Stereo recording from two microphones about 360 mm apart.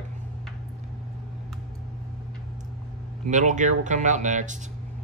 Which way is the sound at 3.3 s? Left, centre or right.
Centre.